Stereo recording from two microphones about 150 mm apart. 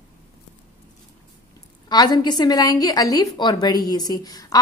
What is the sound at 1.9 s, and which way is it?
A woman's voice, 30° left (ahead or behind).